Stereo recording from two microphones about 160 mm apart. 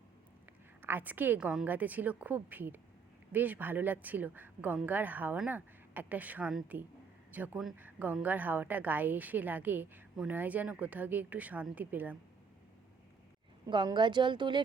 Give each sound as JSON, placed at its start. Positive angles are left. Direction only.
{"t": 0.8, "sound": "a woman's voice", "side_deg": -10}
{"t": 13.7, "sound": "speech", "side_deg": -30}